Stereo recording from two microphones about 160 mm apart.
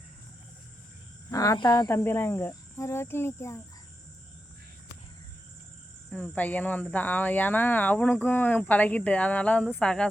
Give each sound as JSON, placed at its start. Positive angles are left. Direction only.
{"t": 1.3, "sound": "speech", "side_deg": 20}
{"t": 1.9, "sound": "speech", "side_deg": 15}
{"t": 6.1, "sound": "speech", "side_deg": 10}